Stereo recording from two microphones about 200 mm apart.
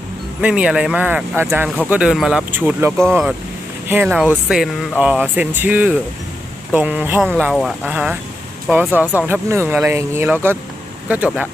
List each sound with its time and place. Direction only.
0.4 s speech: 5° right (ahead or behind)
9.2 s speech: 10° right (ahead or behind)